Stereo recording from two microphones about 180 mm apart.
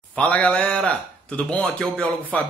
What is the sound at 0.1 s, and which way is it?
Speech, 5° left (ahead or behind).